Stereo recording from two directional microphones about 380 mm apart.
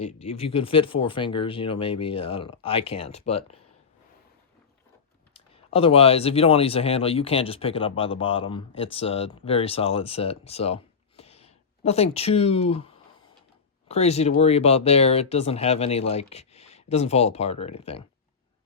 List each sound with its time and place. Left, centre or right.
0.0 s speech: centre
5.3 s speech: centre